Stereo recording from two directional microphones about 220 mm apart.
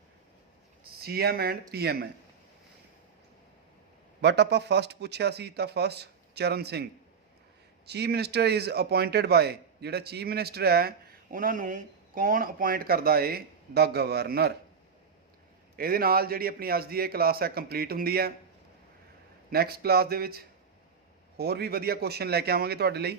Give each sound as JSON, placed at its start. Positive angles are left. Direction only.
{"t": 1.0, "sound": "speech", "side_deg": -45}
{"t": 4.2, "sound": "speech", "side_deg": -50}
{"t": 7.9, "sound": "speech", "side_deg": -50}
{"t": 15.7, "sound": "speech", "side_deg": -45}
{"t": 19.5, "sound": "speech", "side_deg": -45}